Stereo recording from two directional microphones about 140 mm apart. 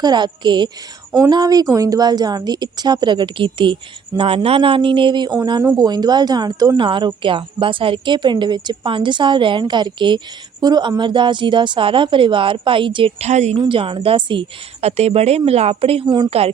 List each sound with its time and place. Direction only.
0.0 s a woman's voice: 30° right (ahead or behind); by 13.6 s 55° right (ahead or behind)
13.6 s a woman's voice: 40° right (ahead or behind)
14.8 s speech: 50° right (ahead or behind)
16.0 s speech: 30° right (ahead or behind)